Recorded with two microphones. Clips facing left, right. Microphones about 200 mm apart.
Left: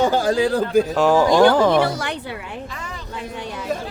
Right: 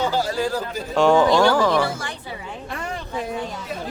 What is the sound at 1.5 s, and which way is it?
Speech, 20° left (ahead or behind).